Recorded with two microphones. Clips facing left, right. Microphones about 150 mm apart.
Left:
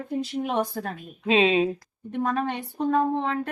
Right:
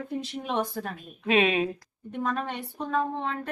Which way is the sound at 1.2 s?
25° left (ahead or behind).